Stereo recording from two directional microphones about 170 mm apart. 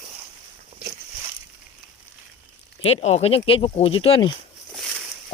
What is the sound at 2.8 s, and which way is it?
Speech, 35° left (ahead or behind).